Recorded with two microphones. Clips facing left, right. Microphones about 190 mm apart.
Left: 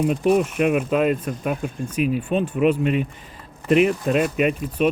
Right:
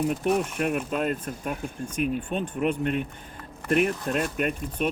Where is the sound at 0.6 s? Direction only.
70° left (ahead or behind).